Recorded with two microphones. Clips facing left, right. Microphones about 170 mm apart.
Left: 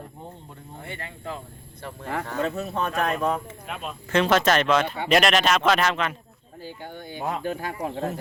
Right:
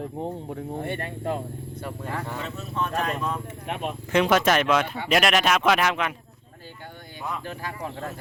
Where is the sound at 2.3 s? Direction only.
60° left (ahead or behind).